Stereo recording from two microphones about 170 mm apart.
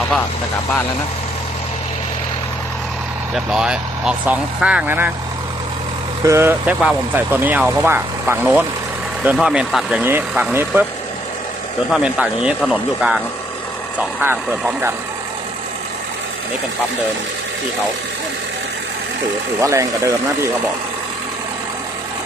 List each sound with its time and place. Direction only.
3.3 s speech: 5° right (ahead or behind)
6.2 s speech: 15° right (ahead or behind)
11.9 s speech: 5° right (ahead or behind)
19.6 s speech: 20° right (ahead or behind)